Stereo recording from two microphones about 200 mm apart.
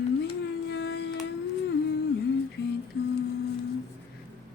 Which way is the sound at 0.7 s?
55° left (ahead or behind).